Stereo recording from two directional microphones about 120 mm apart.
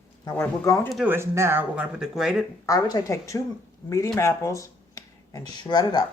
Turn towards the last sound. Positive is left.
turn(degrees=35)  # may be behind; listen again after turning